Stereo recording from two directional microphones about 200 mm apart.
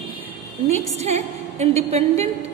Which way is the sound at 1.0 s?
35° right (ahead or behind).